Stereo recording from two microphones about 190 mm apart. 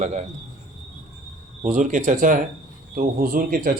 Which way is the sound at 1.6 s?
40° right (ahead or behind).